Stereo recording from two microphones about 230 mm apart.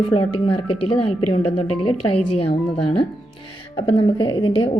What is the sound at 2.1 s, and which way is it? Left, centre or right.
Speech, left.